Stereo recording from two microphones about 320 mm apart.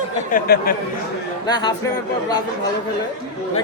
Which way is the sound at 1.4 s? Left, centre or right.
Centre.